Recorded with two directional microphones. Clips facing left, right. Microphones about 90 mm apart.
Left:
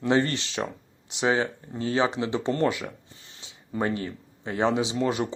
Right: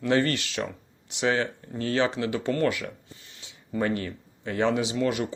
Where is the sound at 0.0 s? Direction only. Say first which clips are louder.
Even; 20° left (ahead or behind).